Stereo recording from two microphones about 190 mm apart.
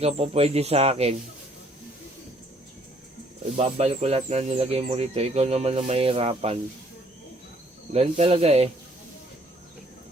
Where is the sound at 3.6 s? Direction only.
35° right (ahead or behind).